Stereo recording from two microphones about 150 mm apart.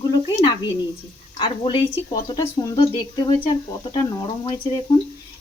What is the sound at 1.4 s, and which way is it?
A woman's voice, 35° left (ahead or behind).